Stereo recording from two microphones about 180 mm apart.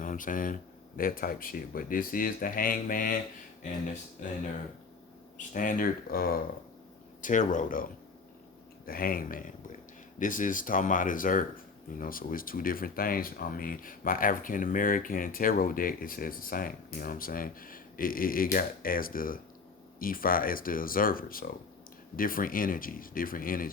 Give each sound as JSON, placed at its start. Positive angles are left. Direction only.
{"t": 0.0, "sound": "speech", "side_deg": 45}
{"t": 4.2, "sound": "speech", "side_deg": 45}
{"t": 5.4, "sound": "speech", "side_deg": 50}
{"t": 8.9, "sound": "speech", "side_deg": 55}